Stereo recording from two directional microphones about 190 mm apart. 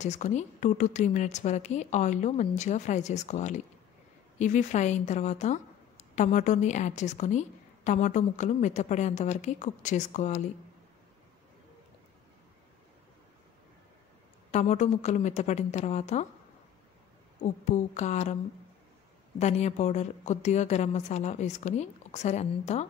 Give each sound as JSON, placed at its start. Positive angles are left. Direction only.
{"t": 0.0, "sound": "a woman's voice", "side_deg": 40}
{"t": 14.5, "sound": "a woman's voice", "side_deg": 40}
{"t": 17.4, "sound": "a woman's voice", "side_deg": 40}
{"t": 19.3, "sound": "a woman's voice", "side_deg": 35}